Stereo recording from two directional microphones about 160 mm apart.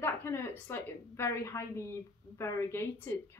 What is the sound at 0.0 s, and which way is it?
A woman's voice, 15° left (ahead or behind).